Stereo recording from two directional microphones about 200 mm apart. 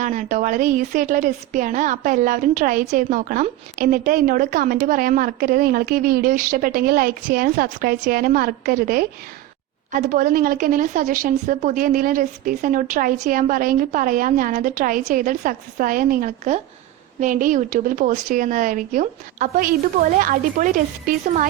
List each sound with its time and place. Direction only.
0.0 s a woman's voice: 40° right (ahead or behind)